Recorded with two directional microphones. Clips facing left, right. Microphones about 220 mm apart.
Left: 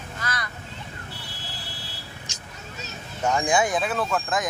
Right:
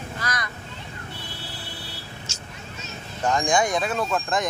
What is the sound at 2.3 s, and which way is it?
Vehicle, 15° left (ahead or behind).